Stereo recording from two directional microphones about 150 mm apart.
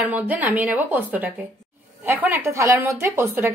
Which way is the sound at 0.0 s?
10° right (ahead or behind).